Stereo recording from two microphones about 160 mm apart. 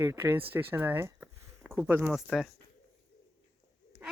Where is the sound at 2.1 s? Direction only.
Centre (ahead or behind).